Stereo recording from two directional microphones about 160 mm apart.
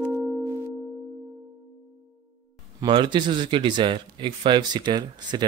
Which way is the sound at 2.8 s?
30° right (ahead or behind).